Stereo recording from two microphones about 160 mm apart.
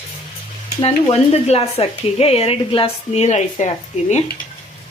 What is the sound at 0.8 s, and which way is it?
Speech, 40° left (ahead or behind).